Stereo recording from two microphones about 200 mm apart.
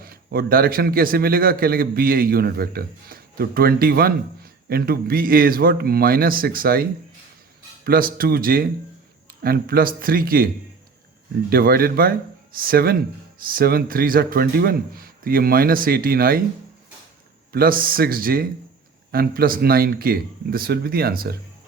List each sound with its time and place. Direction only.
0.0 s speech: 50° right (ahead or behind)
7.9 s speech: 45° right (ahead or behind)
17.5 s speech: 45° right (ahead or behind)